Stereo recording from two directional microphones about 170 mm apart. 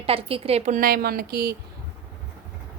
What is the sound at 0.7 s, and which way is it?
Speech, 60° right (ahead or behind).